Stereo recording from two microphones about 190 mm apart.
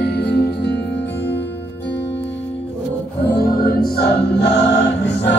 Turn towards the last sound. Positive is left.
turn(degrees=65)  # may be behind; listen again after turning